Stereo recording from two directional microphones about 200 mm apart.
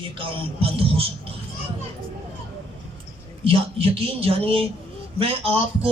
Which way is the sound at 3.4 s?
30° right (ahead or behind).